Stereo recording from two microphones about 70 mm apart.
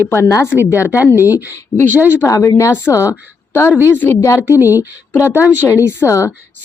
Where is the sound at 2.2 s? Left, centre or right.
Left.